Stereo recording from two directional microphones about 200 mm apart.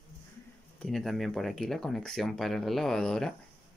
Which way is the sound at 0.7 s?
Centre (ahead or behind).